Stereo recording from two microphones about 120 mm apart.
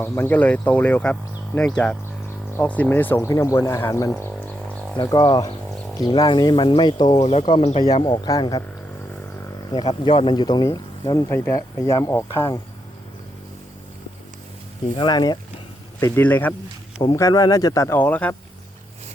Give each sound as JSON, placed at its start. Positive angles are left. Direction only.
{"t": 0.0, "sound": "speech", "side_deg": 15}
{"t": 5.0, "sound": "speech", "side_deg": 35}
{"t": 7.2, "sound": "speech", "side_deg": 55}
{"t": 8.0, "sound": "speech", "side_deg": 35}
{"t": 9.7, "sound": "speech", "side_deg": 40}
{"t": 11.3, "sound": "speech", "side_deg": 20}
{"t": 14.9, "sound": "speech", "side_deg": 35}
{"t": 16.0, "sound": "speech", "side_deg": 20}
{"t": 17.2, "sound": "speech", "side_deg": 30}
{"t": 17.9, "sound": "speech", "side_deg": 15}